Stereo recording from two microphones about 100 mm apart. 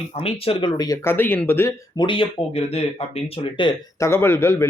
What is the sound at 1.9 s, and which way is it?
Speech, 55° left (ahead or behind).